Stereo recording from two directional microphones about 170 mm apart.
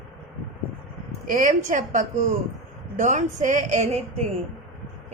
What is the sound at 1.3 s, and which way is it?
A woman's voice, 50° right (ahead or behind).